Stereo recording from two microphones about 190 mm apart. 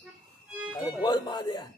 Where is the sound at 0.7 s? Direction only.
20° left (ahead or behind).